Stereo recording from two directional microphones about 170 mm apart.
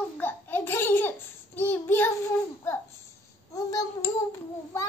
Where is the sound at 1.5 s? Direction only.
10° left (ahead or behind).